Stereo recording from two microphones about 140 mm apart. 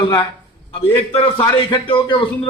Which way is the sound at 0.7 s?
40° left (ahead or behind).